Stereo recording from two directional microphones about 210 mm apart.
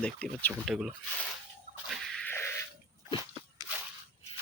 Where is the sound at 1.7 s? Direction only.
Centre (ahead or behind).